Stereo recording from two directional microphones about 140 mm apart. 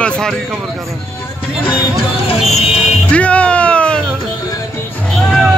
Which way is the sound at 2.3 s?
45° left (ahead or behind).